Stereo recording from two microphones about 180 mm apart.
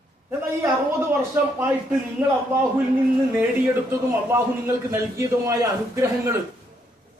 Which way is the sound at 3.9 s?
15° right (ahead or behind).